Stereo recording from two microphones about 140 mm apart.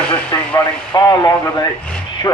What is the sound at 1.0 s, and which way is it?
Speech, 30° left (ahead or behind).